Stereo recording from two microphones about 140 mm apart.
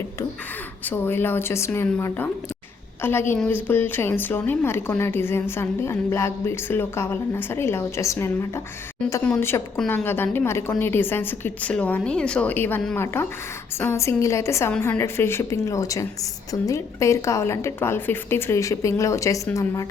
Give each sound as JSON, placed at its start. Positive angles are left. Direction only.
{"t": 0.9, "sound": "a woman's voice", "side_deg": 15}